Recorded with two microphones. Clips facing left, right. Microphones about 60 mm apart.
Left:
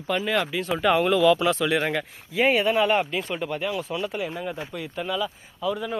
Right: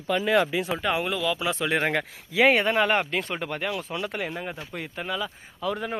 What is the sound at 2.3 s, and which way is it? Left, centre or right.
Speech, right.